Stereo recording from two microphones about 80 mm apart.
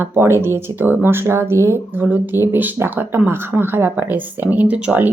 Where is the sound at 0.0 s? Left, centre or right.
Right.